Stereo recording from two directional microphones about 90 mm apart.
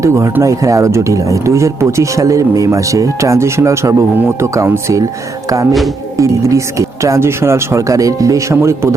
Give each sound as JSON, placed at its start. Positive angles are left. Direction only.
{"t": 0.0, "sound": "speech", "side_deg": -30}
{"t": 6.1, "sound": "speech", "side_deg": -35}